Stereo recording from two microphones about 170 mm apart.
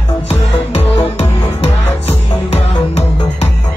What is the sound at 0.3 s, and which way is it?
Music, 35° left (ahead or behind).